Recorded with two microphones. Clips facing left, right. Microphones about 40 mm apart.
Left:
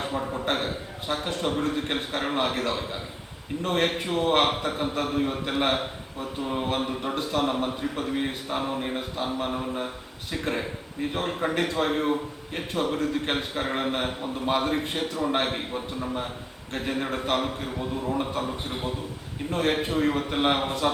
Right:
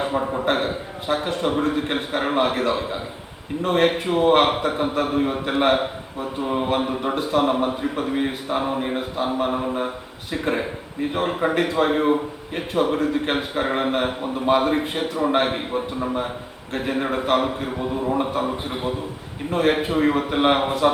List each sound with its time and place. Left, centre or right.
0.0 s a man's voice: centre
0.4 s a sound: centre
1.0 s a man's voice: centre